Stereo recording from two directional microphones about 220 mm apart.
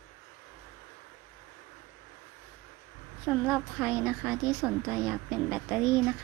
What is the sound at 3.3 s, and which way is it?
A woman's voice, 5° right (ahead or behind).